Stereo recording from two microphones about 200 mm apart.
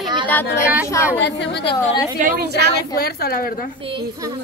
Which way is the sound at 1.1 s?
60° left (ahead or behind).